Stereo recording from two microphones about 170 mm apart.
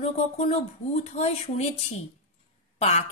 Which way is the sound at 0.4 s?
40° left (ahead or behind).